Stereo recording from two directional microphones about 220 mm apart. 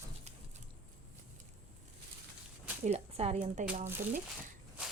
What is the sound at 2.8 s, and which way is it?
A woman's voice, 30° right (ahead or behind).